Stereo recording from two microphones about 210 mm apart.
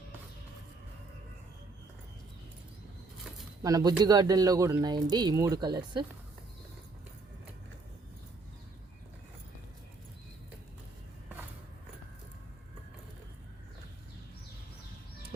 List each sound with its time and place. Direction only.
3.6 s speech: 15° right (ahead or behind)